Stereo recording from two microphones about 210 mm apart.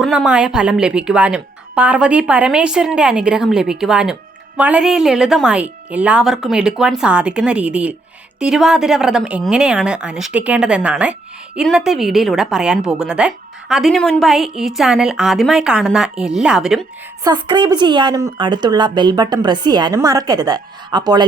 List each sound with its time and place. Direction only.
0.0 s a woman's voice: 5° right (ahead or behind)
17.2 s a woman's voice: 20° right (ahead or behind)